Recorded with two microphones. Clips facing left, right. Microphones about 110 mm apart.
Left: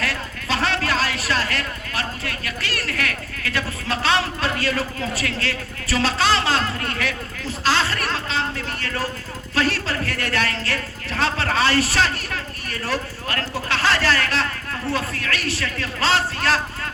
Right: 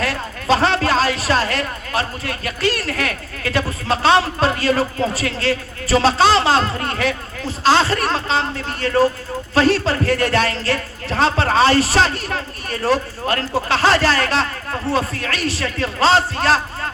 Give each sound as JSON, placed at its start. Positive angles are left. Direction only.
{"t": 0.0, "sound": "a woman's voice", "side_deg": -30}